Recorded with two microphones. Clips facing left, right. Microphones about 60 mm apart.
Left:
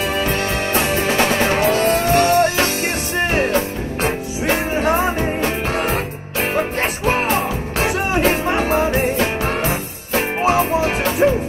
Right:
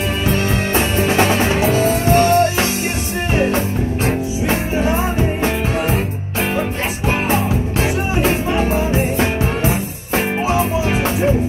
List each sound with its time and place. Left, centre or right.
1.0 s music: right
1.4 s music: left
4.0 s music: left
7.8 s music: left
10.4 s music: left